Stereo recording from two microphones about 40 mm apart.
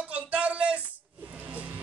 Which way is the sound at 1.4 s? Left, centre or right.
Right.